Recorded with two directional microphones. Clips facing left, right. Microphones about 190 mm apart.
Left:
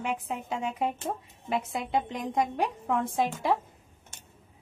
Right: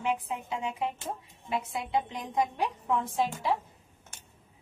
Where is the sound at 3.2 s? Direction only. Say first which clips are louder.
Left 4 dB; 50° left (ahead or behind).